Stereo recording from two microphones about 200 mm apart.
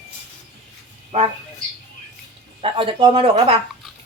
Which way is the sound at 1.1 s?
35° right (ahead or behind).